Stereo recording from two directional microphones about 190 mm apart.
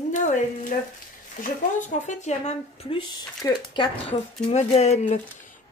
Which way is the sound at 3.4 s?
25° left (ahead or behind).